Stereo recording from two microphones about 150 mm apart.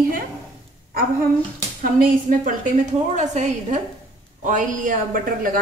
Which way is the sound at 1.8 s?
60° right (ahead or behind).